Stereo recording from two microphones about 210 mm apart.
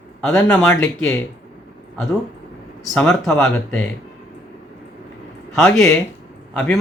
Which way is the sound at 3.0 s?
10° left (ahead or behind).